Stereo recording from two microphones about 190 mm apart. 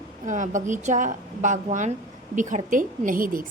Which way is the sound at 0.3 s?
40° right (ahead or behind).